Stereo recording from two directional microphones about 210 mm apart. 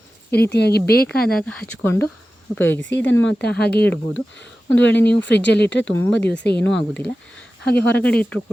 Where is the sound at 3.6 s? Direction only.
50° left (ahead or behind).